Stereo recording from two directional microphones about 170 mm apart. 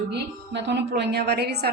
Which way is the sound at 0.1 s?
90° right.